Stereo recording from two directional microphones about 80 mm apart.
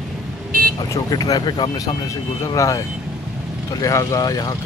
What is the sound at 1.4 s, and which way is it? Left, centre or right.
Speech, left.